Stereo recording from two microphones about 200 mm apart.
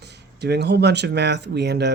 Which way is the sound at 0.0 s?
55° right (ahead or behind).